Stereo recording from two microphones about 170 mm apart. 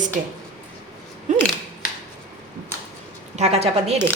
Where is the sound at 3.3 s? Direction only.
40° right (ahead or behind).